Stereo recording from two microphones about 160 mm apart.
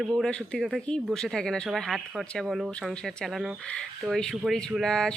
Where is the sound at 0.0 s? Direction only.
5° left (ahead or behind).